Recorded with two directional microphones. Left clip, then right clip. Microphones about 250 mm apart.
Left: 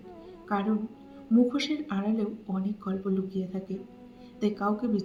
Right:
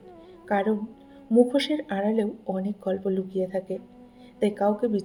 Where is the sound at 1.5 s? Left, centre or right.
Right.